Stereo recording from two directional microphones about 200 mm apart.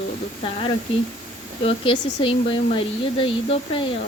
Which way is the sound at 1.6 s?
25° left (ahead or behind).